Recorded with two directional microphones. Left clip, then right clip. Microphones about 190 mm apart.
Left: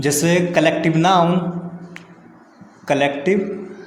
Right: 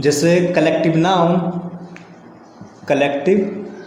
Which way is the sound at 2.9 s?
30° left (ahead or behind).